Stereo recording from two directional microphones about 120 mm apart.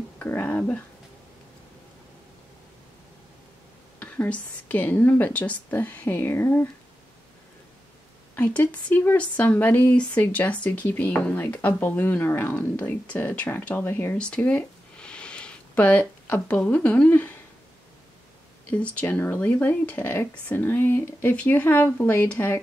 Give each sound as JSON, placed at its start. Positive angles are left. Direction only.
{"t": 0.2, "sound": "speech", "side_deg": 15}
{"t": 4.0, "sound": "speech", "side_deg": 10}
{"t": 8.4, "sound": "speech", "side_deg": 10}
{"t": 18.7, "sound": "speech", "side_deg": 10}